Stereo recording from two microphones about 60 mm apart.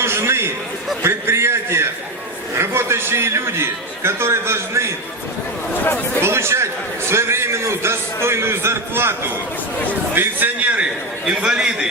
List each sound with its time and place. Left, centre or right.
0.0 s a sound: right
2.6 s a man's voice: right
6.1 s a man's voice: right
10.2 s a man's voice: right